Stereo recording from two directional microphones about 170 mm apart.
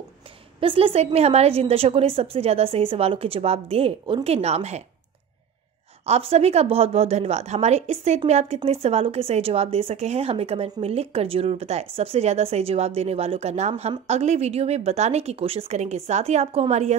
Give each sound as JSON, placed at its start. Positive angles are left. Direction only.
{"t": 0.6, "sound": "a woman's voice", "side_deg": -35}
{"t": 6.0, "sound": "a woman's voice", "side_deg": -40}